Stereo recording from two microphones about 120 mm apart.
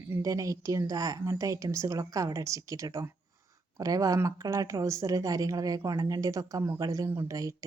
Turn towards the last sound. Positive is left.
turn(degrees=-20)  # may be behind; listen again after turning